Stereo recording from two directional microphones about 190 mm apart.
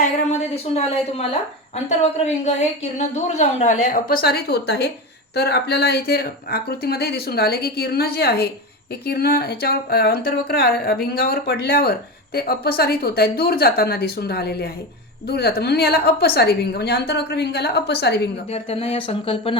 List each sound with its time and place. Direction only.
0.0 s a woman's voice: 35° left (ahead or behind); by 18.3 s 60° left (ahead or behind)
18.5 s speech: 30° left (ahead or behind)